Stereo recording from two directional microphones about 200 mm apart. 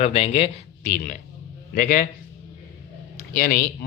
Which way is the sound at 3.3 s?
45° left (ahead or behind).